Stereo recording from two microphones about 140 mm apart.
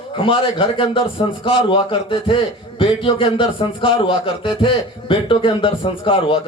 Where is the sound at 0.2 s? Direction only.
40° left (ahead or behind).